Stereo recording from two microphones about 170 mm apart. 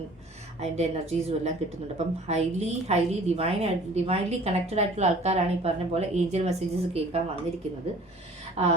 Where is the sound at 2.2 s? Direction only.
40° right (ahead or behind).